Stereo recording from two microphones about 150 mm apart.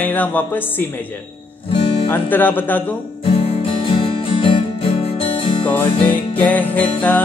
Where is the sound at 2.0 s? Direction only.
10° left (ahead or behind).